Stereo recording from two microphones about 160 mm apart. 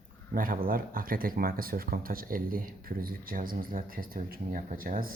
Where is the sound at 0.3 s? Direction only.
60° right (ahead or behind).